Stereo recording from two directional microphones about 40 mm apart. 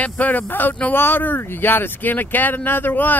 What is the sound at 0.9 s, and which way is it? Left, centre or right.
Speech, left.